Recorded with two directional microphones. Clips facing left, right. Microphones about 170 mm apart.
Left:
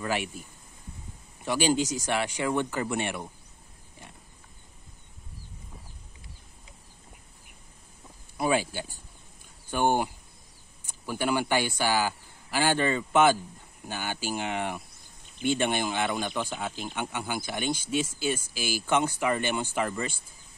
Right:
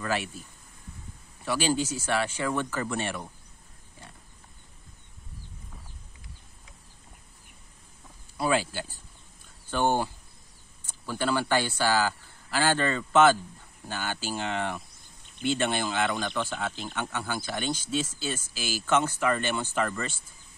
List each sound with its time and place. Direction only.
0.0 s speech: 15° left (ahead or behind)
8.4 s speech: 15° left (ahead or behind)